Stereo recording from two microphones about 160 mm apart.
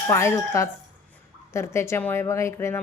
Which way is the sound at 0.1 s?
15° left (ahead or behind).